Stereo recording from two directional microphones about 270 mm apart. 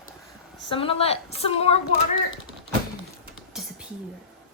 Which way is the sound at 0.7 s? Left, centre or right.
Centre.